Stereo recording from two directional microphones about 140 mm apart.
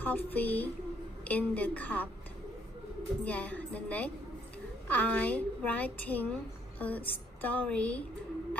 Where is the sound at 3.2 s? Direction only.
10° left (ahead or behind).